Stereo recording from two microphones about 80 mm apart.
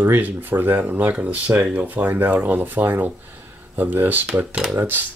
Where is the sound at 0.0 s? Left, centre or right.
Right.